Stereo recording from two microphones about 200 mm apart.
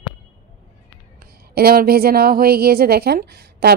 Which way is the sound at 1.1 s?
50° right (ahead or behind).